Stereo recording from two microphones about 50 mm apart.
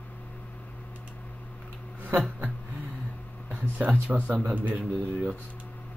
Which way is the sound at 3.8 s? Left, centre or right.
Right.